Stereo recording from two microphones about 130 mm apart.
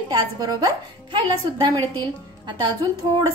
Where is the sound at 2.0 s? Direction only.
35° right (ahead or behind).